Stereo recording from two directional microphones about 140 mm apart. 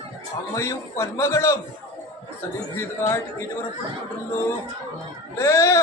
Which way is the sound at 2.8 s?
20° left (ahead or behind).